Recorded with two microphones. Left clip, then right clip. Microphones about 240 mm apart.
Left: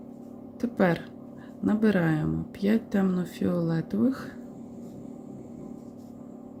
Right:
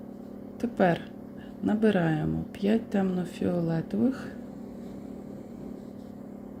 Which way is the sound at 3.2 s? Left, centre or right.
Centre.